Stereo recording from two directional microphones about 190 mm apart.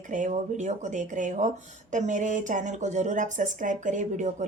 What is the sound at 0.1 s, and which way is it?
Speech, 40° right (ahead or behind).